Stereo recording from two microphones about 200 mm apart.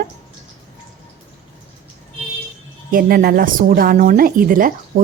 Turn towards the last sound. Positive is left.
turn(degrees=-45)  # may be behind; listen again after turning